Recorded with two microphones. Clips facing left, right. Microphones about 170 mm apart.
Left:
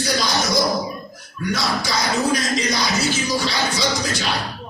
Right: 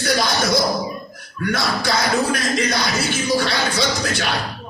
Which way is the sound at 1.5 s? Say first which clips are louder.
Right 2 dB; 55° right (ahead or behind).